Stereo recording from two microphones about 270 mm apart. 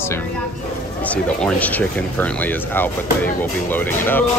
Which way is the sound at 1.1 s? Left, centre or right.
Centre.